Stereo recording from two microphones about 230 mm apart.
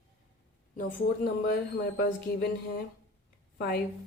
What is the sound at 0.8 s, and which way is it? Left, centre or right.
A woman's voice, left.